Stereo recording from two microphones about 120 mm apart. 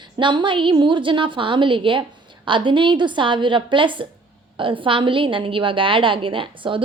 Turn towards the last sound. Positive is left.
turn(degrees=-45)  # may be behind; listen again after turning